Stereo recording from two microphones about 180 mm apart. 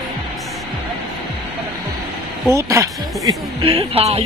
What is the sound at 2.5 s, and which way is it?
Speech, 15° right (ahead or behind).